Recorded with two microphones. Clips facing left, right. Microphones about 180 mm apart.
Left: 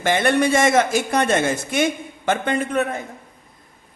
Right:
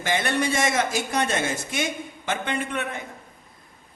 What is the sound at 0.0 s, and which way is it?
A man's voice, 55° left (ahead or behind).